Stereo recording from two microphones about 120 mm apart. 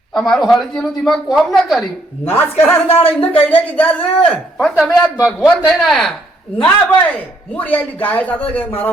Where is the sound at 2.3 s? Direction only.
15° left (ahead or behind).